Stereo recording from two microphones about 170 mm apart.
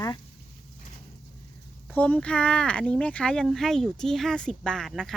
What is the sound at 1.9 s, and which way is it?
Speech, 10° left (ahead or behind).